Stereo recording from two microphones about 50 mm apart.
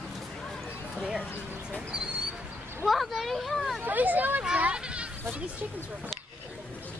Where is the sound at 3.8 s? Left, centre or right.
Right.